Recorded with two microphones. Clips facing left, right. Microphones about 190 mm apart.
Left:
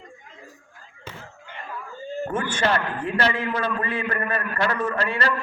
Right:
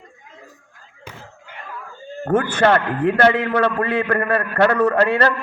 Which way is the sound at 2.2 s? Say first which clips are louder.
Right 8 dB; 60° right (ahead or behind).